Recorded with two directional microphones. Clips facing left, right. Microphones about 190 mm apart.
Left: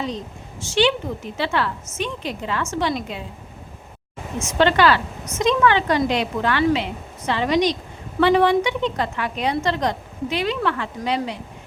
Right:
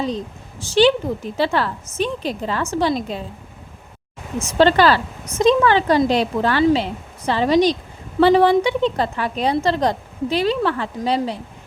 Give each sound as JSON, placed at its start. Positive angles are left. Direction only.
{"t": 0.6, "sound": "a woman's voice", "side_deg": -35}
{"t": 4.4, "sound": "a woman's voice", "side_deg": -35}